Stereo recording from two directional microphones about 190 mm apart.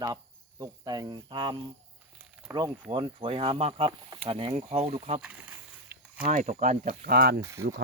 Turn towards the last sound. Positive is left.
turn(degrees=-15)  # may be behind; listen again after turning